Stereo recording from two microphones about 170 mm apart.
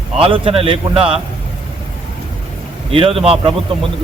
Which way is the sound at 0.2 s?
30° right (ahead or behind).